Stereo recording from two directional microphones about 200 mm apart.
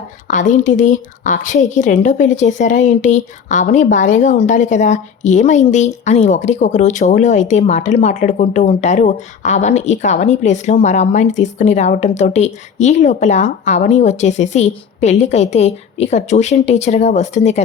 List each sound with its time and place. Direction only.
0.3 s a woman's voice: 40° left (ahead or behind)